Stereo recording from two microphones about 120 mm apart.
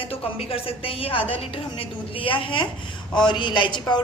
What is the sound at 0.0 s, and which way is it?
A woman's voice, 55° left (ahead or behind).